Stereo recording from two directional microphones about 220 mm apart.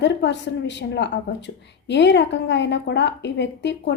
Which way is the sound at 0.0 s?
50° left (ahead or behind).